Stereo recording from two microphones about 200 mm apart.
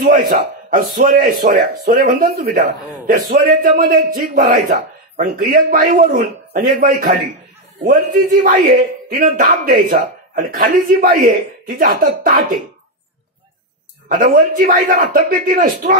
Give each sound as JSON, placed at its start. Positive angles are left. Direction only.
{"t": 0.7, "sound": "a man's voice", "side_deg": -45}
{"t": 14.0, "sound": "a man's voice", "side_deg": -45}